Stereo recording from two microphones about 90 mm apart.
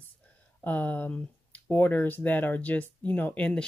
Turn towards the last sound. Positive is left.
turn(degrees=15)  # may be behind; listen again after turning